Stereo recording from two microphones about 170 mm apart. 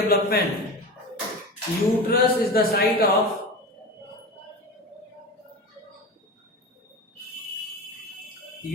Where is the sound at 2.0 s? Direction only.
60° left (ahead or behind).